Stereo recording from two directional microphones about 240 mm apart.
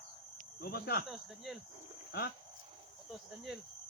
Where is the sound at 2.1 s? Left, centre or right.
Left.